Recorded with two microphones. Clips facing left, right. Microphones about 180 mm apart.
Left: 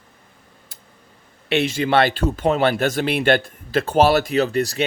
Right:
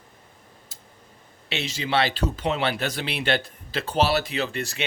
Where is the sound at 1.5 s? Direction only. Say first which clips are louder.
Left 8 dB; 55° left (ahead or behind); by 4.8 s 40° left (ahead or behind).